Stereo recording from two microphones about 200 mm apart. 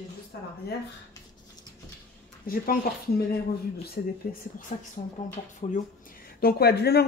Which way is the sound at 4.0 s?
45° left (ahead or behind).